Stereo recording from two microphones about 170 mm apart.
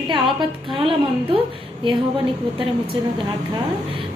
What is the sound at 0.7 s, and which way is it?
Speech, 30° right (ahead or behind).